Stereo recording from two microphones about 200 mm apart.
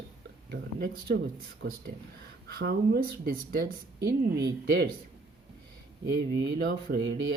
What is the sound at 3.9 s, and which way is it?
Speech, 15° right (ahead or behind).